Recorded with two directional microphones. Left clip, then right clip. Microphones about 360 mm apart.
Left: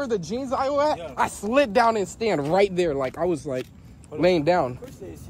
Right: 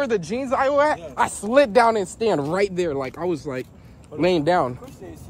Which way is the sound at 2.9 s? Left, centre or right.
Right.